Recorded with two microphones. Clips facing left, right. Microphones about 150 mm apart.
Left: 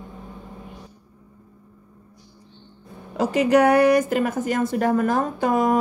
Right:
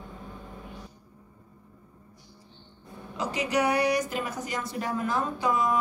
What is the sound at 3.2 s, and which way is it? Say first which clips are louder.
Speech: left 10 dB; 55° left (ahead or behind).